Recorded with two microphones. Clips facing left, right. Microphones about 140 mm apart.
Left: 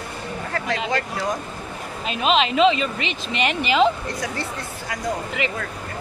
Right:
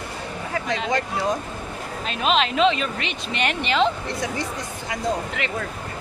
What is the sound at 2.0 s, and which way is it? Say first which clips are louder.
Speech: left 2 dB; 5° left (ahead or behind).